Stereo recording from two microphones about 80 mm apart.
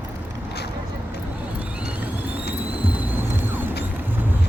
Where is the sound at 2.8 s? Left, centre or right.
Centre.